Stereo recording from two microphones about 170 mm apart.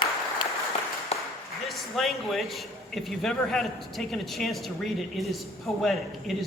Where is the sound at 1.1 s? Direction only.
35° left (ahead or behind).